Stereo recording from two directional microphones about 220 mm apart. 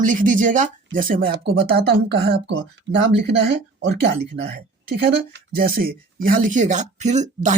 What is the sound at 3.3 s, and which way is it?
Speech, 50° right (ahead or behind).